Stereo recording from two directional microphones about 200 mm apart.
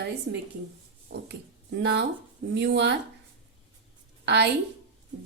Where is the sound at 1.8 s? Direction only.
60° right (ahead or behind).